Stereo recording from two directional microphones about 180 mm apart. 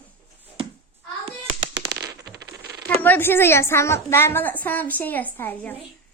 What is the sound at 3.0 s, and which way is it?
A woman's voice, 10° left (ahead or behind).